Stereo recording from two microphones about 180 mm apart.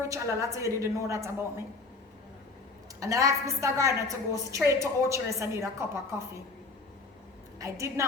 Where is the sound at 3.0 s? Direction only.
15° right (ahead or behind).